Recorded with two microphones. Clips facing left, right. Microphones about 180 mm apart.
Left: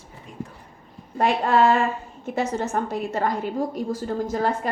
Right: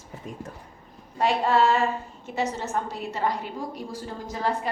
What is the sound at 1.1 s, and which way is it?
A woman's voice, 55° left (ahead or behind).